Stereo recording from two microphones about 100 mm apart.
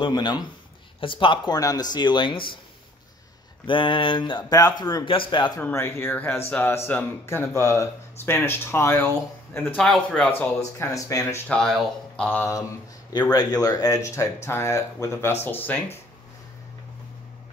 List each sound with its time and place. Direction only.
0.0 s speech: 45° left (ahead or behind)
1.0 s speech: 55° left (ahead or behind)
3.6 s mantra: 55° left (ahead or behind)
4.5 s speech: 40° left (ahead or behind)
5.0 s mantra: 60° left (ahead or behind)
5.6 s speech: 20° left (ahead or behind)
9.8 s speech: 10° left (ahead or behind)
10.6 s speech: 35° left (ahead or behind)
11.4 s speech: 10° left (ahead or behind)
13.3 s speech: 40° left (ahead or behind); by 15.8 s 20° left (ahead or behind)